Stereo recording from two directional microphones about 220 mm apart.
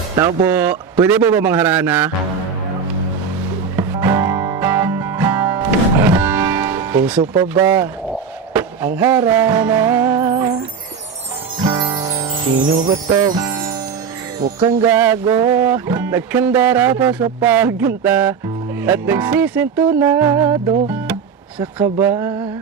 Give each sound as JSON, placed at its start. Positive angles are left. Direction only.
{"t": 0.2, "sound": "music", "side_deg": -15}
{"t": 3.8, "sound": "music", "side_deg": -10}
{"t": 12.6, "sound": "jingle bell", "side_deg": -20}
{"t": 14.3, "sound": "music", "side_deg": -15}